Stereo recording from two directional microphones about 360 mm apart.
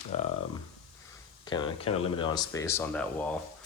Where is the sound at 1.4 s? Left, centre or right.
Centre.